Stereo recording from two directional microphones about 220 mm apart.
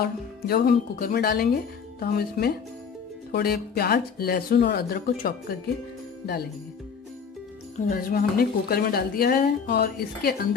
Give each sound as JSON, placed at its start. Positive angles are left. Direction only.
{"t": 0.0, "sound": "a woman's voice", "side_deg": 45}
{"t": 7.9, "sound": "a woman's voice", "side_deg": 40}